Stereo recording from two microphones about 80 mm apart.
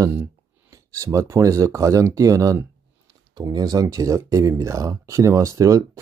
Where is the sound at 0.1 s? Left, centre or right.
Right.